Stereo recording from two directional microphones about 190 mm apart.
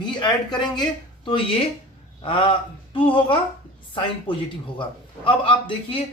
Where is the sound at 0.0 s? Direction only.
25° left (ahead or behind).